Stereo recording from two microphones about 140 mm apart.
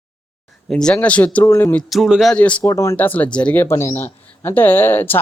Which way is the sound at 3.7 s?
20° left (ahead or behind).